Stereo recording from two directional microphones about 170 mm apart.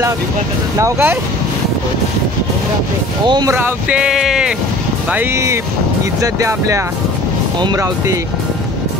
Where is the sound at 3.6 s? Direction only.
10° right (ahead or behind).